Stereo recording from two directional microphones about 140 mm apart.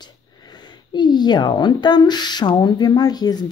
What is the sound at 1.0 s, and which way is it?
A woman's voice, 30° left (ahead or behind).